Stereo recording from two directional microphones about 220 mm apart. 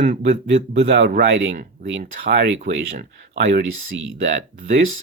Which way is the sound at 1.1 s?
45° right (ahead or behind).